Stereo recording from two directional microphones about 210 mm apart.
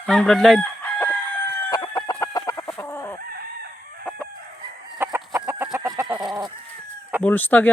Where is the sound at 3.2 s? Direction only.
45° right (ahead or behind).